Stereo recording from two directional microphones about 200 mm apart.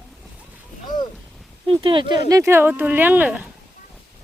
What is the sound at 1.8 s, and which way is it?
Speech, 25° right (ahead or behind).